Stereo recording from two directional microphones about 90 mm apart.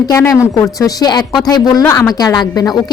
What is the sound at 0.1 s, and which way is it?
Speech, 35° left (ahead or behind).